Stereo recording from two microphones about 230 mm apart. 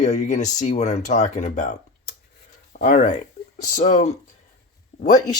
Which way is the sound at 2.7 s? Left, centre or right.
Left.